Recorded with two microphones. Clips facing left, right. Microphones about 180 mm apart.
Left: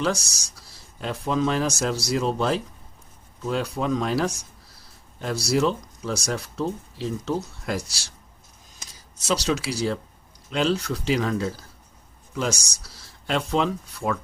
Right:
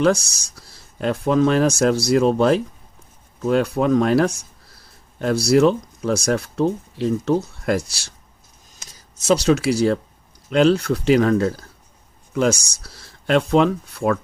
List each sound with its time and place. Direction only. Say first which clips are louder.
0.0 s speech: right 8 dB; 55° right (ahead or behind)
9.2 s speech: right 8 dB; 50° right (ahead or behind)